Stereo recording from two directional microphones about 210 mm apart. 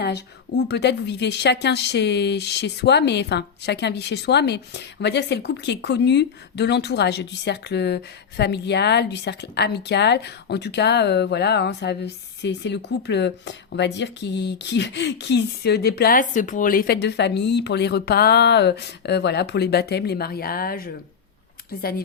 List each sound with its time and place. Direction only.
0.7 s speech: 55° left (ahead or behind)